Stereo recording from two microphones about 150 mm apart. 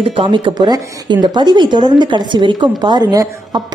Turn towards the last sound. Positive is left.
turn(degrees=-25)  # may be behind; listen again after turning